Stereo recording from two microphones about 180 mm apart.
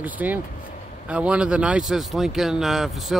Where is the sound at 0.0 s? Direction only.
10° right (ahead or behind).